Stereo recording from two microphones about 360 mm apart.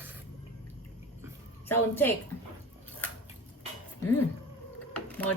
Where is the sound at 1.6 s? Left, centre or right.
Centre.